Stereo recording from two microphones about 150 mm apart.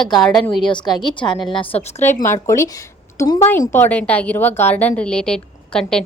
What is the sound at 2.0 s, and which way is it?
A woman's voice, 15° left (ahead or behind).